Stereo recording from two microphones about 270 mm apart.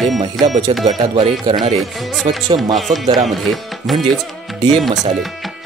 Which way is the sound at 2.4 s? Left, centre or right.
Centre.